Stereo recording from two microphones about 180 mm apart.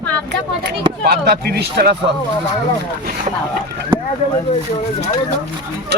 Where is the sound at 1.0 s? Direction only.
60° right (ahead or behind).